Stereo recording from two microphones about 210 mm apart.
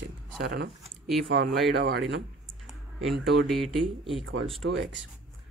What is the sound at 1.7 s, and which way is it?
Speech, 55° right (ahead or behind).